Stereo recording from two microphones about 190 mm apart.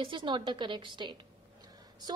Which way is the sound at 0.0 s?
25° right (ahead or behind).